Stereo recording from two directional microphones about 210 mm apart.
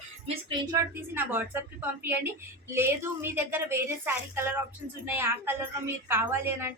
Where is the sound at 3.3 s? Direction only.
10° right (ahead or behind).